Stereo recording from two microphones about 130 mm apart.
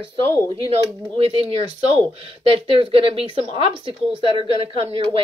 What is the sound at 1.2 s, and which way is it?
Speech, 45° right (ahead or behind).